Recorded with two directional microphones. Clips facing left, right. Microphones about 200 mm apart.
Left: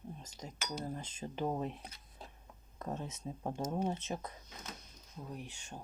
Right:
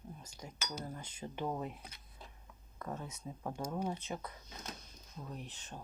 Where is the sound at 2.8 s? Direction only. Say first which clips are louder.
Left 2 dB; 25° left (ahead or behind).